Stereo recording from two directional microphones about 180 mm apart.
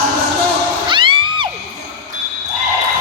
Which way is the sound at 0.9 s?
25° right (ahead or behind).